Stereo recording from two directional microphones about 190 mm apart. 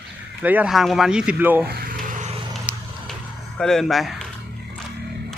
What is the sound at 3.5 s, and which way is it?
Speech, centre (ahead or behind).